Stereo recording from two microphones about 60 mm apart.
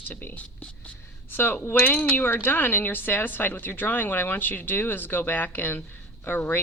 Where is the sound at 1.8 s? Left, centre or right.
Left.